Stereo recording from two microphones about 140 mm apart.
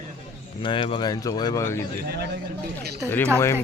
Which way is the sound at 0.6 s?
40° left (ahead or behind).